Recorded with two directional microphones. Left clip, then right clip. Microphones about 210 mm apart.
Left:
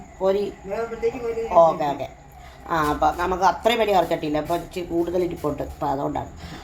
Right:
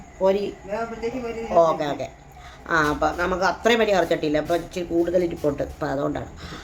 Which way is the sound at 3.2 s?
15° right (ahead or behind).